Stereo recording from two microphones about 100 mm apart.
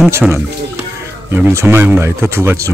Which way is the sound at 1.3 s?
20° right (ahead or behind).